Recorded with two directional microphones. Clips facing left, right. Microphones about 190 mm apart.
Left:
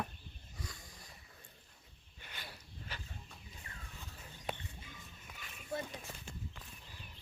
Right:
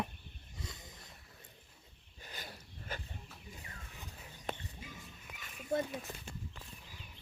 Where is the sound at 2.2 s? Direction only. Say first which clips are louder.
Right 3 dB; 40° right (ahead or behind).